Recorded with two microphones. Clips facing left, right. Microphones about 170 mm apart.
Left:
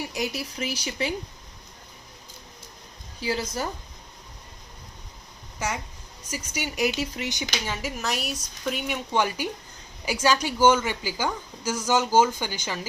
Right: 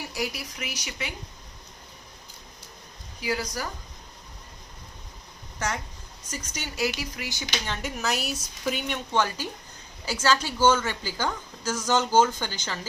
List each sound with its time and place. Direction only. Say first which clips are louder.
0.1 s speech: left 2 dB; 25° left (ahead or behind)
3.2 s speech: left 2 dB; 25° left (ahead or behind)
5.5 s speech: even; 10° left (ahead or behind)
7.7 s a woman's voice: right 2 dB; 5° left (ahead or behind)